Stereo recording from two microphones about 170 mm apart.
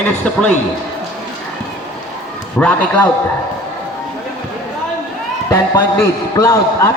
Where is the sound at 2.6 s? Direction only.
10° left (ahead or behind).